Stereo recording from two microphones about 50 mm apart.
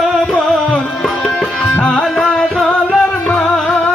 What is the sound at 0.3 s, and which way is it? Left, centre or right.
Music, left.